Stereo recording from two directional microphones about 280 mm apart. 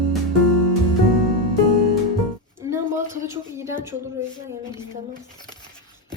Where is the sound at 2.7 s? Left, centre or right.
Centre.